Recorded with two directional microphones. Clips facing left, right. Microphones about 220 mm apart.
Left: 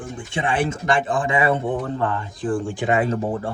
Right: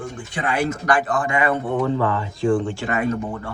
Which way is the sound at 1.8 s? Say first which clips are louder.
Right 3 dB; 90° right.